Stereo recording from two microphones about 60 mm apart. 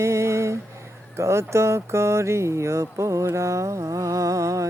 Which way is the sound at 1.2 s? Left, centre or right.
Right.